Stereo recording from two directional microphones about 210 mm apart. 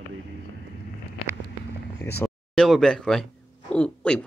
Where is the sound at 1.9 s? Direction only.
10° left (ahead or behind).